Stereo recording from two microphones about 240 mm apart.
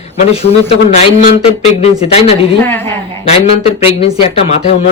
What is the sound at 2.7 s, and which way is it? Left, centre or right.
Speech, centre.